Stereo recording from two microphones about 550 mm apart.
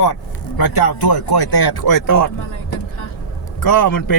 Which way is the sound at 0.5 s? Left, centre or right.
Left.